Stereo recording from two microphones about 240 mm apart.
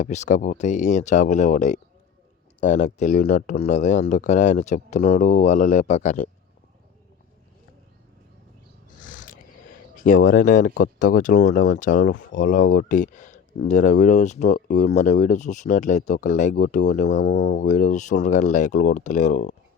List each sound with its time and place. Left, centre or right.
0.0 s speech: left
9.0 s a sound: left
10.0 s speech: left